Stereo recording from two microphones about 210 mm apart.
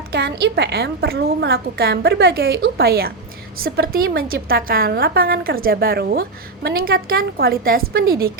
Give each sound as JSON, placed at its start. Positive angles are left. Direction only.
{"t": 0.1, "sound": "a woman's voice", "side_deg": -50}